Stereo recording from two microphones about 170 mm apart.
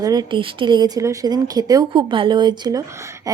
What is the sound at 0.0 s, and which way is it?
Speech, 25° right (ahead or behind).